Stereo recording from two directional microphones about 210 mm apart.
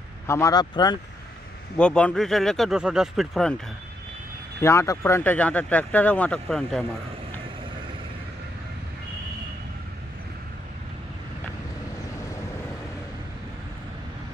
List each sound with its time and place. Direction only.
0.3 s speech: 15° left (ahead or behind)
1.8 s speech: 5° left (ahead or behind)
4.6 s speech: 10° left (ahead or behind)